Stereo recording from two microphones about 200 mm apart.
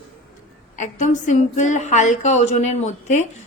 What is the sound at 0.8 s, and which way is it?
A woman's voice, 40° left (ahead or behind).